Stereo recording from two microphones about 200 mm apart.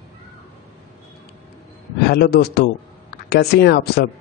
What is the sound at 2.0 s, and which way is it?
Speech, 55° left (ahead or behind).